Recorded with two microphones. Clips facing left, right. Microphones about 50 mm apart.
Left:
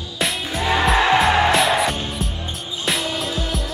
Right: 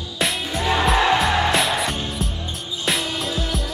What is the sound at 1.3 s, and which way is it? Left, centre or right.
Music, centre.